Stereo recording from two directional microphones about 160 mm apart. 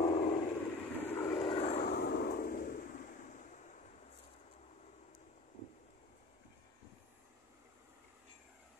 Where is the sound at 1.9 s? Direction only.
75° left (ahead or behind); by 3.4 s 55° left (ahead or behind).